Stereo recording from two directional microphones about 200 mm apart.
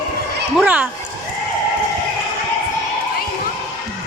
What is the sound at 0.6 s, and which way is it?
Speech, 5° right (ahead or behind).